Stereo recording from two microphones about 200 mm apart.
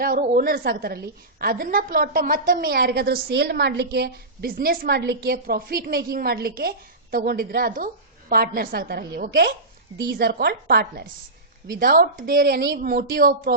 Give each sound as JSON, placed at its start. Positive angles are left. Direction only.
{"t": 0.0, "sound": "a woman's voice", "side_deg": -45}